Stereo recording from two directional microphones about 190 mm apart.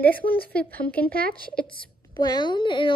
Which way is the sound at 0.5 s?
10° left (ahead or behind).